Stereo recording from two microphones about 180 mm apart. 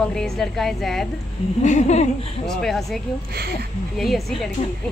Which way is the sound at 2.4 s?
Centre (ahead or behind).